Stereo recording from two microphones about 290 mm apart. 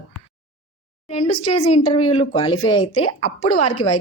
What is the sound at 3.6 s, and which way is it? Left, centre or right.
Speech, left.